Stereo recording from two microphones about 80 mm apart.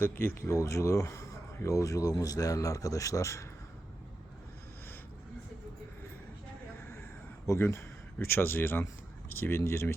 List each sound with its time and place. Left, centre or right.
0.0 s speech: left
7.4 s speech: left